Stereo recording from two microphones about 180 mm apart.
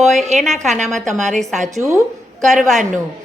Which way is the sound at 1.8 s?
20° right (ahead or behind).